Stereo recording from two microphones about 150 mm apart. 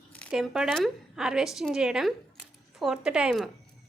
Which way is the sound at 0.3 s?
5° right (ahead or behind).